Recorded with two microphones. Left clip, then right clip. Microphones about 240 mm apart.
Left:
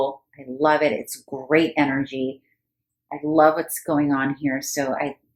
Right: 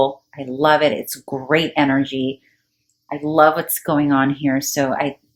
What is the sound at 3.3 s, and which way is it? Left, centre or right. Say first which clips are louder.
A woman's voice: right 3 dB; right.